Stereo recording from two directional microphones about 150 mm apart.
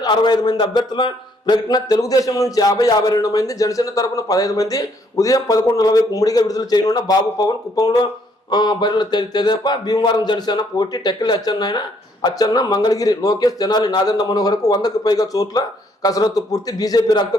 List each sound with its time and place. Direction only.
0.0 s a man's voice: 30° left (ahead or behind)